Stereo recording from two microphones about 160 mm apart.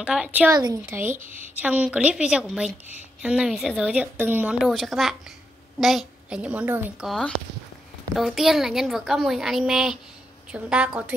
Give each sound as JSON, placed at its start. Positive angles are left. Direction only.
{"t": 0.0, "sound": "a woman's voice", "side_deg": -5}
{"t": 0.5, "sound": "a woman's voice", "side_deg": -25}
{"t": 1.1, "sound": "speech", "side_deg": -50}
{"t": 1.6, "sound": "a woman's voice", "side_deg": -10}
{"t": 7.1, "sound": "a woman's voice", "side_deg": 5}